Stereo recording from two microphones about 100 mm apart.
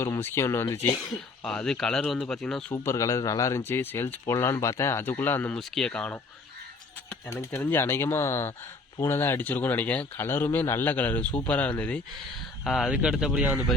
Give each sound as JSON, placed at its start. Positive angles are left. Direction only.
{"t": 0.0, "sound": "speech", "side_deg": 25}
{"t": 1.5, "sound": "speech", "side_deg": 5}
{"t": 2.7, "sound": "a man's voice", "side_deg": 30}
{"t": 5.5, "sound": "speech", "side_deg": 5}
{"t": 7.3, "sound": "speech", "side_deg": 20}
{"t": 12.6, "sound": "speech", "side_deg": 0}